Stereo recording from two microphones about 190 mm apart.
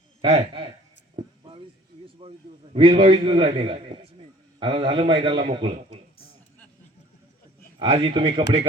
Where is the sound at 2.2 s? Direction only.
30° right (ahead or behind).